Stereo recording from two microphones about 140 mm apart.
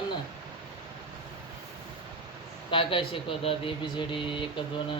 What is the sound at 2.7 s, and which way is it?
Speech, 40° left (ahead or behind).